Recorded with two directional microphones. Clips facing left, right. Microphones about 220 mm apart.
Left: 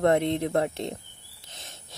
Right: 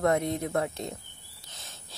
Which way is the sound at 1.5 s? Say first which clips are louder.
Left 3 dB; 25° left (ahead or behind).